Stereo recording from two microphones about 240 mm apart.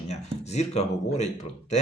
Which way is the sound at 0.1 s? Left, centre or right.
Left.